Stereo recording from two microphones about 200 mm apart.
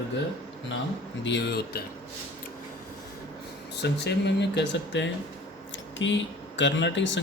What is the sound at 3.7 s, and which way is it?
Speech, 55° left (ahead or behind).